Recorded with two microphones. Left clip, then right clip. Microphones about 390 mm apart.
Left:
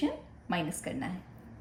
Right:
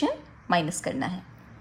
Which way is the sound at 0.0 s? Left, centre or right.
Centre.